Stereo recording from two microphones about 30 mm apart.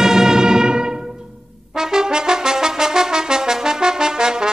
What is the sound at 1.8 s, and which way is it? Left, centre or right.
Brass instrument, right.